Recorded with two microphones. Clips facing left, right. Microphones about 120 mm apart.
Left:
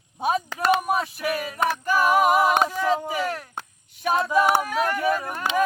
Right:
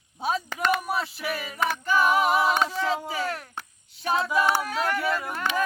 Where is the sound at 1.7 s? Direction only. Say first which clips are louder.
Left 1 dB; 10° left (ahead or behind).